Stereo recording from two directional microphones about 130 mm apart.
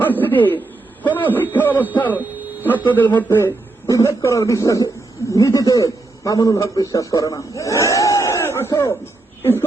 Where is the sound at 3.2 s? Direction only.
15° left (ahead or behind).